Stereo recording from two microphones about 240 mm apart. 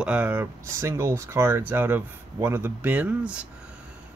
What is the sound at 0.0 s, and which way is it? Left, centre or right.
Speech, centre.